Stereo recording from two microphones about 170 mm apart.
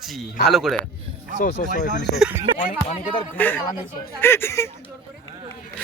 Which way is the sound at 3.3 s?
10° left (ahead or behind).